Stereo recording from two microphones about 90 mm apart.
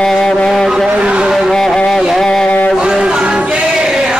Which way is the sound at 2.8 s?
10° right (ahead or behind).